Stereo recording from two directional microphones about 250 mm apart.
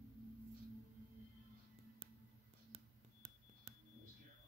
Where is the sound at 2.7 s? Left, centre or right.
Right.